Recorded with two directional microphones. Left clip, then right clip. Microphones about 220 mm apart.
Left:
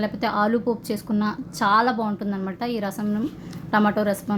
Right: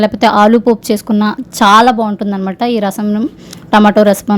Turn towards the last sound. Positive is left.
turn(degrees=-40)  # may be behind; listen again after turning